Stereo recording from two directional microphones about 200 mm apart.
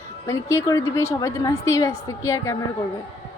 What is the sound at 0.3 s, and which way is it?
A woman's voice, 15° left (ahead or behind).